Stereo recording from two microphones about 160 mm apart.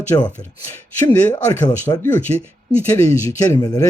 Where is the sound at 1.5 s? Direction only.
15° left (ahead or behind).